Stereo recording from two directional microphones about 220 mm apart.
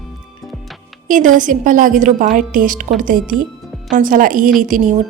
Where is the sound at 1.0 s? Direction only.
35° right (ahead or behind).